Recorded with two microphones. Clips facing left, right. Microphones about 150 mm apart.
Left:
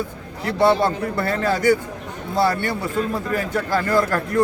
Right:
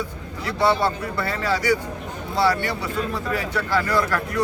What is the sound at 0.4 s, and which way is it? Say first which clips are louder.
Speech: left 3 dB; 50° left (ahead or behind).